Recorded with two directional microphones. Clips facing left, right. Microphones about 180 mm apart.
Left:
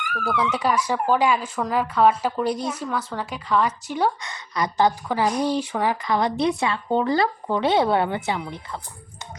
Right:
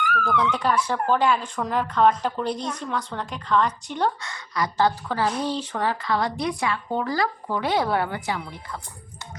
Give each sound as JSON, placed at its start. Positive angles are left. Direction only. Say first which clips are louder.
{"t": 0.1, "sound": "speech", "louder": "left 2 dB", "side_deg": 10}
{"t": 4.2, "sound": "a woman's voice", "louder": "left 1 dB", "side_deg": 20}